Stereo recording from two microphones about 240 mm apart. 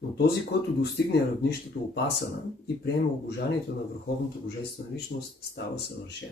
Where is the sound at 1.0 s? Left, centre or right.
Left.